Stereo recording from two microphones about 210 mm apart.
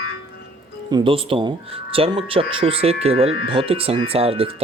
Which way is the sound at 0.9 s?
25° right (ahead or behind).